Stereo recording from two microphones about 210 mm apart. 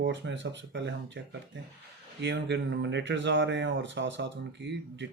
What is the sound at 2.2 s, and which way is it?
Speech, 55° right (ahead or behind).